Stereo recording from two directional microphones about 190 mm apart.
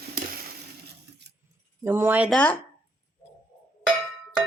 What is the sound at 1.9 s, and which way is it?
Speech, 10° right (ahead or behind).